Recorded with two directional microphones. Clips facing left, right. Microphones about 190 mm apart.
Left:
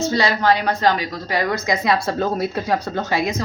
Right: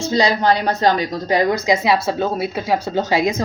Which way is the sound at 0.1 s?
20° right (ahead or behind).